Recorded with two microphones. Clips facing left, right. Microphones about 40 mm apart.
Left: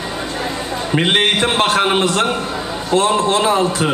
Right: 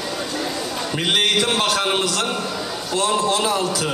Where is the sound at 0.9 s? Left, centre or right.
Left.